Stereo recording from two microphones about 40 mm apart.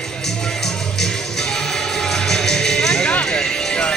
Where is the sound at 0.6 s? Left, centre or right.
Centre.